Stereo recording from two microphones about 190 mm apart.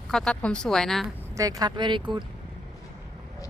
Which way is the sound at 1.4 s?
20° right (ahead or behind).